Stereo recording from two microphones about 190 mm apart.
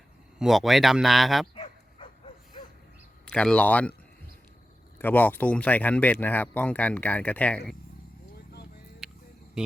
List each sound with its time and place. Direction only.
0.3 s speech: centre (ahead or behind)
1.5 s dog: 30° left (ahead or behind)
3.2 s speech: 5° left (ahead or behind)
4.9 s speech: 10° left (ahead or behind)
9.0 s a sound: centre (ahead or behind)